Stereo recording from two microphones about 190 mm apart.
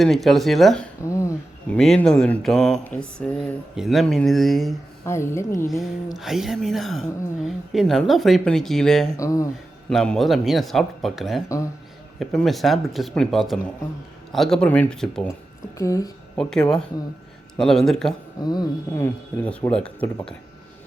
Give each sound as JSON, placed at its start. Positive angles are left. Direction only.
{"t": 0.0, "sound": "speech", "side_deg": 0}
{"t": 1.0, "sound": "speech", "side_deg": 15}
{"t": 1.8, "sound": "speech", "side_deg": 5}
{"t": 5.0, "sound": "speech", "side_deg": 15}
{"t": 6.1, "sound": "speech", "side_deg": 0}
{"t": 9.1, "sound": "speech", "side_deg": 15}
{"t": 9.9, "sound": "speech", "side_deg": 5}
{"t": 15.8, "sound": "speech", "side_deg": 20}
{"t": 16.4, "sound": "speech", "side_deg": 5}
{"t": 18.4, "sound": "speech", "side_deg": 20}